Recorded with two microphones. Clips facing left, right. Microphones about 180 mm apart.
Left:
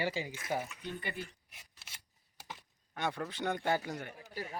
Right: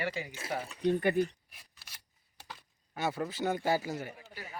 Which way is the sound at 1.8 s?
25° left (ahead or behind).